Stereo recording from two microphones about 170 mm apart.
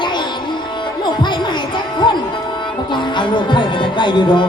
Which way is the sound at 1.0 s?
25° left (ahead or behind).